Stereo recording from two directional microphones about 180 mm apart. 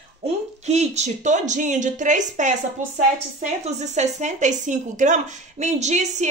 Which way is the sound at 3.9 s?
40° right (ahead or behind).